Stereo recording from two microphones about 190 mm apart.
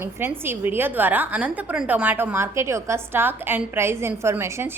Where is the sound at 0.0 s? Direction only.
10° right (ahead or behind).